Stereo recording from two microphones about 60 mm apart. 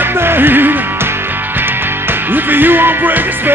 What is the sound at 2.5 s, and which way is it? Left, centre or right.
Music, right.